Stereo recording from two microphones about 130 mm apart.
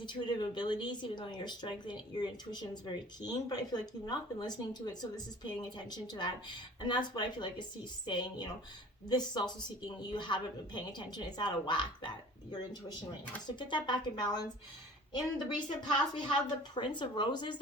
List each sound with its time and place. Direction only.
0.0 s speech: 35° left (ahead or behind)
13.6 s speech: 35° left (ahead or behind)